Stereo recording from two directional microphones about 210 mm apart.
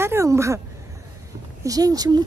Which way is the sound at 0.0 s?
10° right (ahead or behind).